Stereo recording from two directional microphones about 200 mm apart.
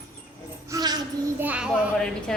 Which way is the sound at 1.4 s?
5° right (ahead or behind).